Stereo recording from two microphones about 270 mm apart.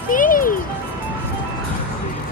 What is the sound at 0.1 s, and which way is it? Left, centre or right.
Music, left.